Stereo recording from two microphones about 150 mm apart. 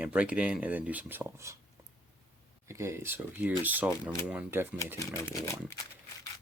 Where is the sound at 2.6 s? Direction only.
20° right (ahead or behind).